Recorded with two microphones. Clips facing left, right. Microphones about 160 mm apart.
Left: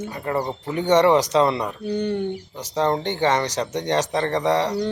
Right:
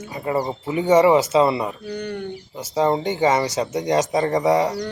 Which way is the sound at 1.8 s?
25° left (ahead or behind).